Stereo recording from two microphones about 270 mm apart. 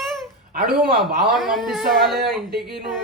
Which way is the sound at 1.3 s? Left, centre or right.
Centre.